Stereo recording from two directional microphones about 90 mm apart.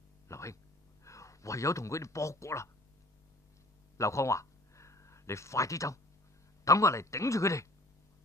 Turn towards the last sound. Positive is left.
turn(degrees=35)  # may be behind; listen again after turning